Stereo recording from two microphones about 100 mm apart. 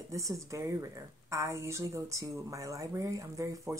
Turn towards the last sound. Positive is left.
turn(degrees=-30)  # may be behind; listen again after turning